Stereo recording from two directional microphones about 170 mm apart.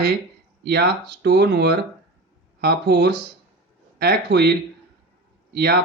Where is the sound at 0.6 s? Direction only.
75° right (ahead or behind).